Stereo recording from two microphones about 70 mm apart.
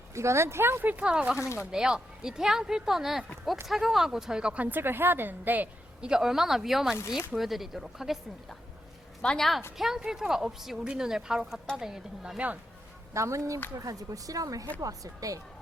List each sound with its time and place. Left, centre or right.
0.1 s speech: right
0.9 s a woman's voice: centre
1.4 s speech: left
1.7 s a woman's voice: centre; by 5.6 s right
6.0 s speech: centre
9.2 s a woman's voice: centre
9.7 s a woman's voice: centre
13.1 s speech: right